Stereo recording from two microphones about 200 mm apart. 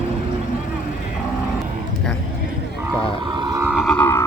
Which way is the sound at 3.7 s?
Centre (ahead or behind).